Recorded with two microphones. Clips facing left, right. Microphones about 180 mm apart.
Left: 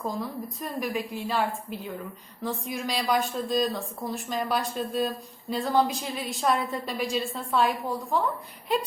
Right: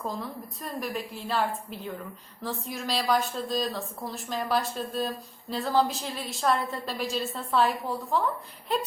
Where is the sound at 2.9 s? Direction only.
Centre (ahead or behind).